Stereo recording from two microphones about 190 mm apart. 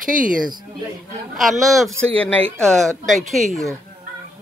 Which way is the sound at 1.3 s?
Centre (ahead or behind).